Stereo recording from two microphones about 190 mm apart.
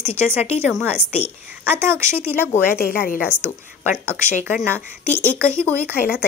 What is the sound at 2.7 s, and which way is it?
Speech, 50° left (ahead or behind).